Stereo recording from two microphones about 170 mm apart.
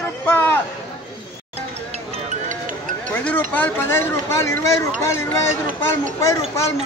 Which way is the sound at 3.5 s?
10° left (ahead or behind).